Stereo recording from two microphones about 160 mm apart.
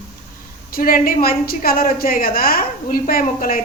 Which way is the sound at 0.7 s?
65° left (ahead or behind).